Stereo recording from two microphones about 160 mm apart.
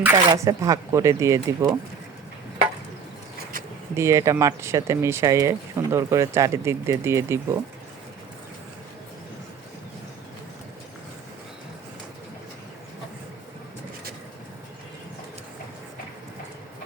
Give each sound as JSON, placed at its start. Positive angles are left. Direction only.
{"t": 0.0, "sound": "speech", "side_deg": -20}
{"t": 3.9, "sound": "speech", "side_deg": -15}